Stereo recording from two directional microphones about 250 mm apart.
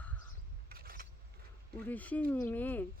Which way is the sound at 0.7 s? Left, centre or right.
Right.